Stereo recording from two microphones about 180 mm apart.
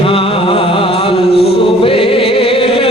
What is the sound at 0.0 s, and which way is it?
Music, 30° left (ahead or behind).